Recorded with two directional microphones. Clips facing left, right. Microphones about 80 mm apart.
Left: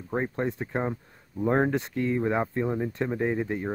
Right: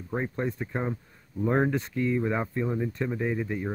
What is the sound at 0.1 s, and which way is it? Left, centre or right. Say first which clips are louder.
Speech: left 2 dB; left.